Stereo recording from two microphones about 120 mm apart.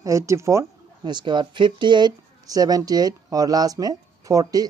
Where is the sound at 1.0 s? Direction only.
40° right (ahead or behind).